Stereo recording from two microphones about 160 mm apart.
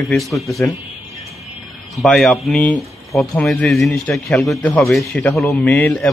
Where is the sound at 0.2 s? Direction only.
Centre (ahead or behind).